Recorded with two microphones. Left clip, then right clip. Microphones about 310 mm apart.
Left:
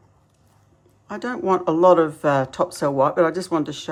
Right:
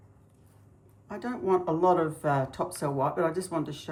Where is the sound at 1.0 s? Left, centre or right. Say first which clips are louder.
Left 8 dB; left.